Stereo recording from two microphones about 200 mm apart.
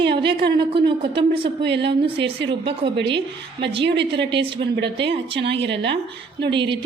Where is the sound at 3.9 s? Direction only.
60° right (ahead or behind).